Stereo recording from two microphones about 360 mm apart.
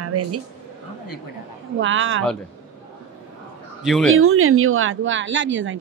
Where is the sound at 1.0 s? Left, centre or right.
Left.